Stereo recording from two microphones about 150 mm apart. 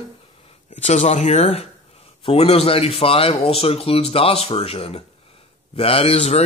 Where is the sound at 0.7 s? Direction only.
50° left (ahead or behind).